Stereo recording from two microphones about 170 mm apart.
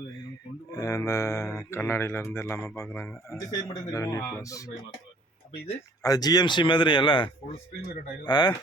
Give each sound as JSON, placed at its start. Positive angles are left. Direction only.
{"t": 0.7, "sound": "speech", "side_deg": 20}
{"t": 6.0, "sound": "speech", "side_deg": 20}